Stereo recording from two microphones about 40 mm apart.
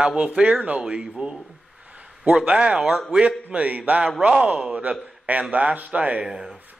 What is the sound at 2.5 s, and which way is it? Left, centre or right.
Speech, right.